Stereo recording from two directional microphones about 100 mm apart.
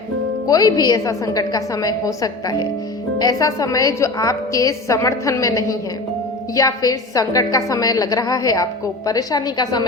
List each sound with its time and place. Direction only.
0.4 s a woman's voice: 40° left (ahead or behind)